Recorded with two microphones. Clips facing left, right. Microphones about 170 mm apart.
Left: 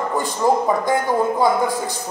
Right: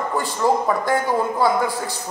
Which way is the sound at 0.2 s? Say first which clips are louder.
Left 1 dB; 15° left (ahead or behind).